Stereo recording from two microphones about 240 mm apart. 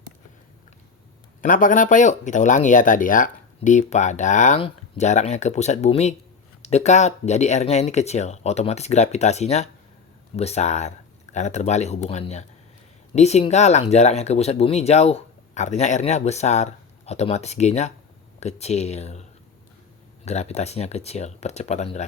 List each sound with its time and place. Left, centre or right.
1.4 s speech: left
20.2 s speech: left